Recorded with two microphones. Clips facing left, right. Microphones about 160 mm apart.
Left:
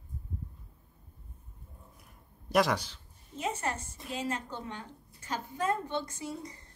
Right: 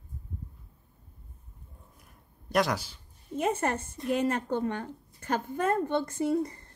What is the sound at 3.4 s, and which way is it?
Speech, 55° right (ahead or behind).